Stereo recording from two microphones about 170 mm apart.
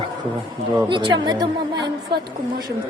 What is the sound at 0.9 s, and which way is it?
A woman's voice, 25° right (ahead or behind).